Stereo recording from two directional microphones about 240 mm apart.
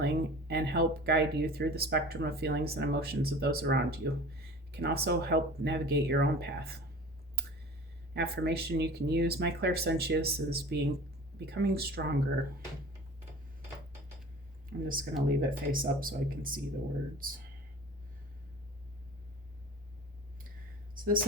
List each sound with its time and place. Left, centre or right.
0.0 s speech: right
8.1 s speech: right
14.7 s speech: right
20.9 s a sound: right